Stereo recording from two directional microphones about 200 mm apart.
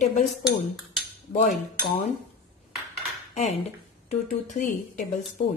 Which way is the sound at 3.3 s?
35° left (ahead or behind).